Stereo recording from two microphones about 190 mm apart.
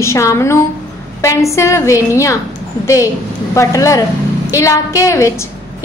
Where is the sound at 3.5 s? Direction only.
15° left (ahead or behind).